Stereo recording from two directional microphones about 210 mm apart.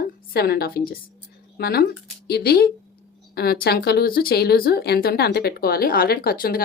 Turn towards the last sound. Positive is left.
turn(degrees=45)  # may be behind; listen again after turning